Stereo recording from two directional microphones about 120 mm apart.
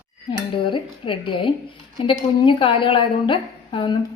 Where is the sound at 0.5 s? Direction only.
45° left (ahead or behind).